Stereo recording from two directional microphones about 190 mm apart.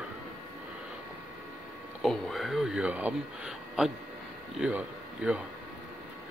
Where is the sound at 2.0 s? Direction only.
Centre (ahead or behind).